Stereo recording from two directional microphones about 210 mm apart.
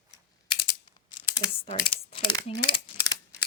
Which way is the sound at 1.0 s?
25° left (ahead or behind).